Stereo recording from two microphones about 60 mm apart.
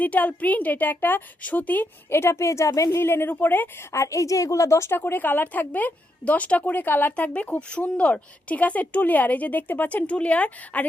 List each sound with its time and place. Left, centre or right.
0.0 s a woman's voice: left
3.0 s a woman's voice: left
3.9 s a woman's voice: left
4.9 s a woman's voice: left